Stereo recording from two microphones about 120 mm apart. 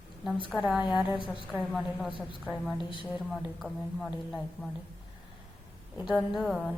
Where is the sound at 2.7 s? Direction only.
45° left (ahead or behind).